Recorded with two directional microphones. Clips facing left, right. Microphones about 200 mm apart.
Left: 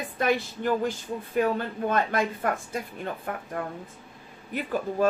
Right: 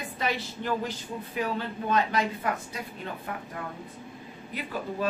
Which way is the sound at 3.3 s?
50° left (ahead or behind).